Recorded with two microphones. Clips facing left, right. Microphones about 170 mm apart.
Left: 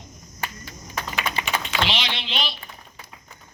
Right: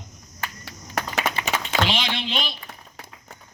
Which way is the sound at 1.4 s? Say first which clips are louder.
Right 1 dB; 45° right (ahead or behind).